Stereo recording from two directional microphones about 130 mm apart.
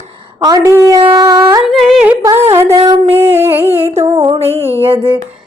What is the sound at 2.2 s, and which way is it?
Music, 20° right (ahead or behind).